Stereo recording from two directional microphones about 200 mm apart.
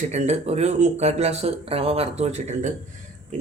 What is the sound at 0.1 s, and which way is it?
Speech, 35° right (ahead or behind).